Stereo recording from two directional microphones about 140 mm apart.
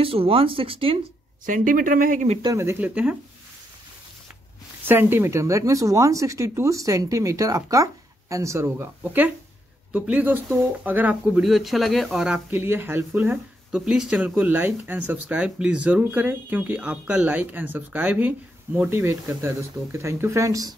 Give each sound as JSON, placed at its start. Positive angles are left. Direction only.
{"t": 0.0, "sound": "speech", "side_deg": -40}
{"t": 1.4, "sound": "speech", "side_deg": -70}
{"t": 2.4, "sound": "speech", "side_deg": -20}
{"t": 4.8, "sound": "speech", "side_deg": -15}
{"t": 12.4, "sound": "speech", "side_deg": -15}